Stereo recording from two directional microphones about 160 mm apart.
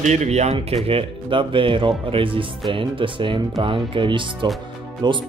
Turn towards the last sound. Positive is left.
turn(degrees=-30)  # may be behind; listen again after turning